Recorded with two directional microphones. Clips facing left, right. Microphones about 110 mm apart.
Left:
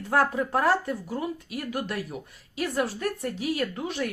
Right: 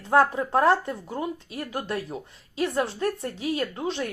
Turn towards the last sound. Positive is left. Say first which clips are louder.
# right 1 dB
turn(degrees=-25)  # may be behind; listen again after turning